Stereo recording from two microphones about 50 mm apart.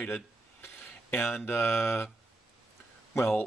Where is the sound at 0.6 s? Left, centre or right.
Left.